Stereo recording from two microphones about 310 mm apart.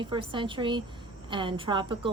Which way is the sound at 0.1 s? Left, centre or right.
Centre.